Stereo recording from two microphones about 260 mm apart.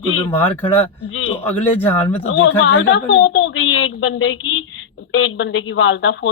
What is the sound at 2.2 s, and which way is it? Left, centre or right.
Speech, left.